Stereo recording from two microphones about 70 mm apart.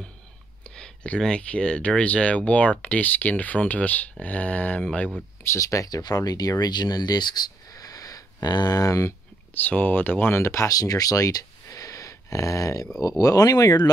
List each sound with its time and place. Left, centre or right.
0.7 s a sound: centre
1.2 s speech: centre
5.4 s speech: left
6.6 s speech: left
7.7 s a sound: left
9.5 s speech: left
10.7 s speech: left